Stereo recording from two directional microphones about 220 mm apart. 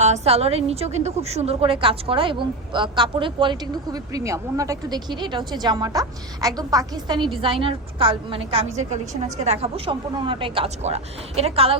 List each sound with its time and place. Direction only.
0.0 s a woman's voice: 30° right (ahead or behind)